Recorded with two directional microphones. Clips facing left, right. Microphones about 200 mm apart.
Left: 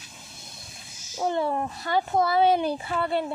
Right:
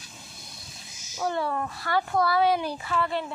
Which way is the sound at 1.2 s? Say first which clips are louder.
Left 2 dB; 20° left (ahead or behind).